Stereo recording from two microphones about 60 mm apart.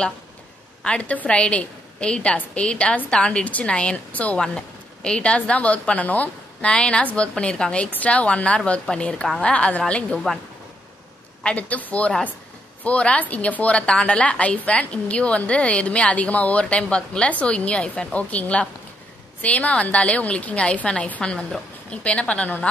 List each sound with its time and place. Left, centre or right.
0.8 s a woman's voice: centre
4.4 s a woman's voice: centre
11.4 s a woman's voice: left